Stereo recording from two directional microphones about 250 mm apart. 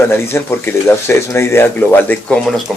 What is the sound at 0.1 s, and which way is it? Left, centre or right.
Speech, centre.